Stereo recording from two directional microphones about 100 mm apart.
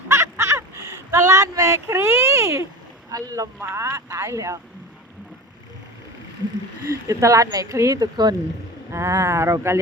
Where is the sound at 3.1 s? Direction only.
35° right (ahead or behind).